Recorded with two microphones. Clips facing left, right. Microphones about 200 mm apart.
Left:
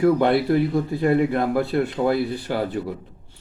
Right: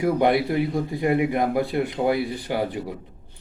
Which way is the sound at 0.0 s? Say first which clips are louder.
Left 2 dB; 15° right (ahead or behind).